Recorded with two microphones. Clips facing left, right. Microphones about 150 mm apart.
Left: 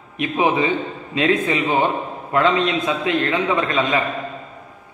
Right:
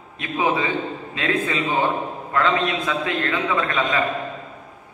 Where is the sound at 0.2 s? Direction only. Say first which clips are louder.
Left 4 dB; 20° left (ahead or behind).